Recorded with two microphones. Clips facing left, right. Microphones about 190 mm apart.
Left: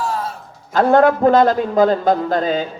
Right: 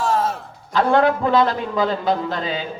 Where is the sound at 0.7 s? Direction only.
45° left (ahead or behind).